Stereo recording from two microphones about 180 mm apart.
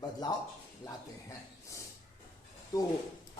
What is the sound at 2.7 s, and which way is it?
Speech, 20° left (ahead or behind).